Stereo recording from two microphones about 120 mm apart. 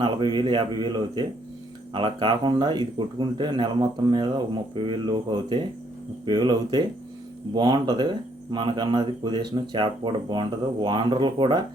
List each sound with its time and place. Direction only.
0.0 s speech: 40° right (ahead or behind)